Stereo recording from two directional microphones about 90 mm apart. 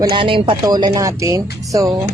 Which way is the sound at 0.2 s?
75° right (ahead or behind).